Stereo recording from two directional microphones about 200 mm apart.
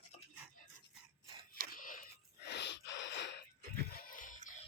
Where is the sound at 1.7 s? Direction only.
45° left (ahead or behind); by 3.4 s 60° left (ahead or behind).